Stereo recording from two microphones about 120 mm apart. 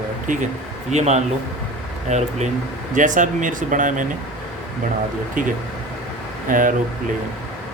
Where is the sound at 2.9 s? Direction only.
90° right.